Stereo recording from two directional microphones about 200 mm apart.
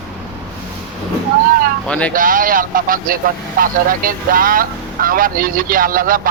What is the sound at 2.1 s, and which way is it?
Speech, 45° right (ahead or behind).